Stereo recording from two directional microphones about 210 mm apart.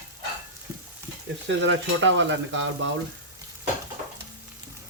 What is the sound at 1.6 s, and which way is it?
Stir, 60° right (ahead or behind).